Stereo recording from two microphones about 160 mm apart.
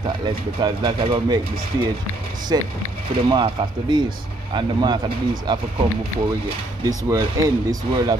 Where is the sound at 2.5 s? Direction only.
25° right (ahead or behind).